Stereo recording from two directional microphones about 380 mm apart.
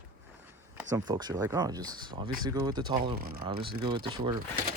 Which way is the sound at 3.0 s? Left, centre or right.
Right.